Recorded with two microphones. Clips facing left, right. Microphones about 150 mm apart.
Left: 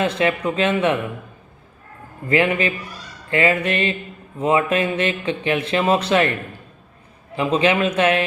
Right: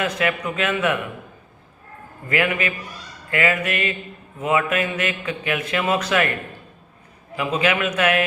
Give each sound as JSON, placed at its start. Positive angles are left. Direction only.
{"t": 0.0, "sound": "speech", "side_deg": 30}
{"t": 2.3, "sound": "speech", "side_deg": 30}
{"t": 7.3, "sound": "speech", "side_deg": 30}